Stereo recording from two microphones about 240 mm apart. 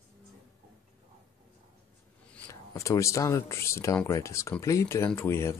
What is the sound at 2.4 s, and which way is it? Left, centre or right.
Speech, centre.